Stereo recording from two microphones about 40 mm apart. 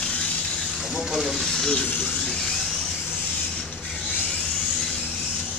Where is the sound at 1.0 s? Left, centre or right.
Centre.